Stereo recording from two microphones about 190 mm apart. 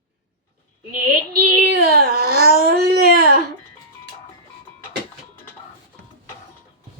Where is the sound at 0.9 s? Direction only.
50° right (ahead or behind).